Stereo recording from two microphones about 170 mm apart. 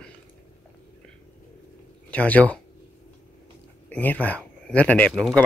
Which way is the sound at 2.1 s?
10° left (ahead or behind).